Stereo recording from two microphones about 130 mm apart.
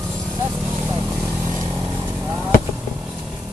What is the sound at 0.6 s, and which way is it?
Vehicle, 10° right (ahead or behind).